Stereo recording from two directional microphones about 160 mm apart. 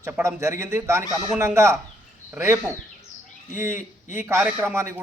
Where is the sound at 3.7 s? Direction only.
55° left (ahead or behind).